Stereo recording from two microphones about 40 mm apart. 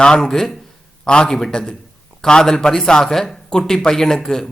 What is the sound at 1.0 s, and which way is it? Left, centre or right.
Speech, left.